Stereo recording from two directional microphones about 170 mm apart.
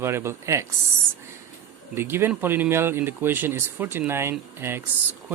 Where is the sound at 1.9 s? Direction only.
15° right (ahead or behind).